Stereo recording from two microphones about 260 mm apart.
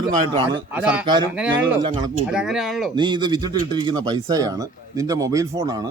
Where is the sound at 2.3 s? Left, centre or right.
Centre.